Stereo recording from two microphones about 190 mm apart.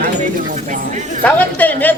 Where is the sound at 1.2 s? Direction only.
10° left (ahead or behind).